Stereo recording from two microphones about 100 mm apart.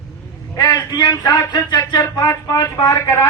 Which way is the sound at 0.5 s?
40° left (ahead or behind).